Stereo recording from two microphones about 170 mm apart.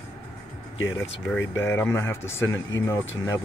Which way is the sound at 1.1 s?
90° left.